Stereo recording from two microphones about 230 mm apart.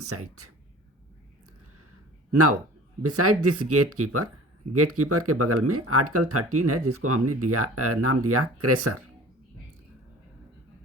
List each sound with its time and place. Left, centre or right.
0.0 s speech: right
2.3 s speech: right